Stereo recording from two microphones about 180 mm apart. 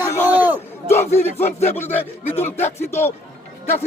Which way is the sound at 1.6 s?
10° left (ahead or behind).